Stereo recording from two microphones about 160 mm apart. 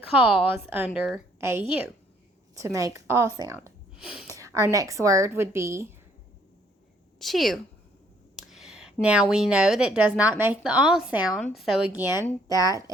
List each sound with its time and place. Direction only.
0.1 s a woman's voice: 10° right (ahead or behind)
3.9 s speech: 5° right (ahead or behind)
4.3 s speech: 20° right (ahead or behind)
7.2 s a woman's voice: centre (ahead or behind)
12.5 s speech: 20° right (ahead or behind)